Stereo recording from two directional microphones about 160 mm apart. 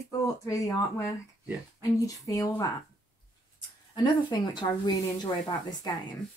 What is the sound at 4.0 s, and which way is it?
Speech, 30° left (ahead or behind).